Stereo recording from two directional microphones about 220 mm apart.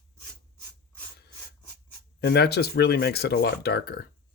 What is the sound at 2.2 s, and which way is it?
Speech, 50° left (ahead or behind).